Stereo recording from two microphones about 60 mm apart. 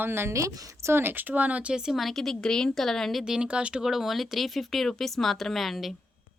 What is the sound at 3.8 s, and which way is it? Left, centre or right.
Speech, centre.